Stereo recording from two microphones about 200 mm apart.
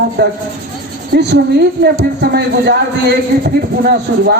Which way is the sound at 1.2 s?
60° right (ahead or behind).